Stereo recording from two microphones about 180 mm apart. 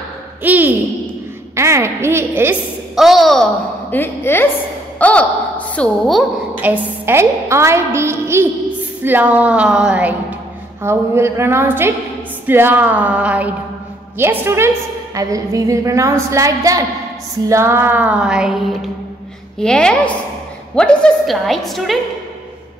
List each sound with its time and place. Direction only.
0.4 s a woman's voice: 10° right (ahead or behind)
3.0 s a woman's voice: centre (ahead or behind)
3.9 s a woman's voice: 10° left (ahead or behind)